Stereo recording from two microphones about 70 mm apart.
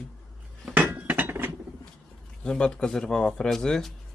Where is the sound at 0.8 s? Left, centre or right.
Right.